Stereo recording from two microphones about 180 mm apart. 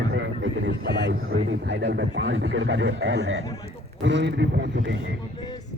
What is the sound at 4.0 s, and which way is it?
Speech, 75° right (ahead or behind).